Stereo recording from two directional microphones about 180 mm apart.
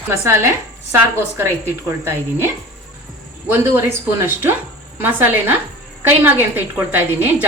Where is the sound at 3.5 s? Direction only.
10° right (ahead or behind).